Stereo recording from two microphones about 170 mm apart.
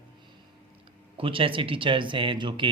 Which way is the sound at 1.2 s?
30° right (ahead or behind).